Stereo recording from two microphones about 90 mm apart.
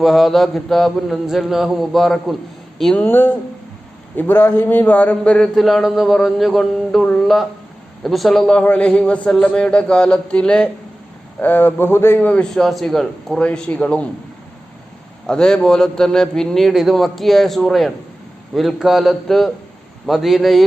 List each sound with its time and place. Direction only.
0.0 s a man's voice: centre (ahead or behind)
2.9 s a man's voice: 20° left (ahead or behind)
5.5 s a man's voice: centre (ahead or behind); by 12.3 s 25° left (ahead or behind)
12.3 s a man's voice: 5° left (ahead or behind)
15.3 s a man's voice: 10° left (ahead or behind)